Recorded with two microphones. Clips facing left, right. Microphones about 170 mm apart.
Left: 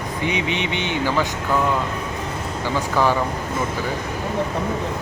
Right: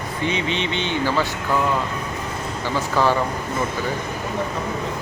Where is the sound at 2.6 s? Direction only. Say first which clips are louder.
Even; 15° left (ahead or behind).